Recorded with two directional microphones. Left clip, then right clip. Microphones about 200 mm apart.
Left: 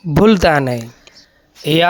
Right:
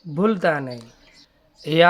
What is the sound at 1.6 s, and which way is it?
Speech, 30° left (ahead or behind).